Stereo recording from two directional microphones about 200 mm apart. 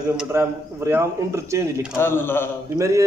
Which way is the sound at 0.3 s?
10° right (ahead or behind).